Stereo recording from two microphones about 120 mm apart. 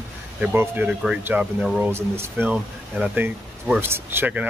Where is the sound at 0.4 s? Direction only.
15° right (ahead or behind).